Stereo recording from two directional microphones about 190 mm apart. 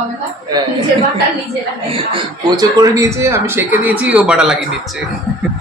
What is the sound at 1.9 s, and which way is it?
Speech, 25° right (ahead or behind).